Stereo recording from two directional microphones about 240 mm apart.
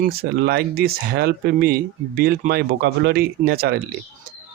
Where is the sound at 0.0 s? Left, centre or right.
Right.